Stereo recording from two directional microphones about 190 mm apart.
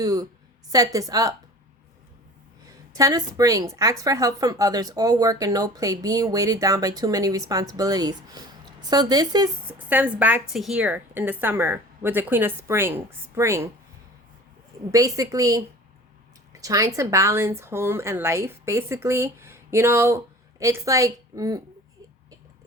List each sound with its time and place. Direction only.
0.0 s a woman's voice: 20° right (ahead or behind)
2.6 s a woman's voice: 20° right (ahead or behind)
9.7 s a woman's voice: 10° right (ahead or behind)
14.8 s a woman's voice: 15° right (ahead or behind)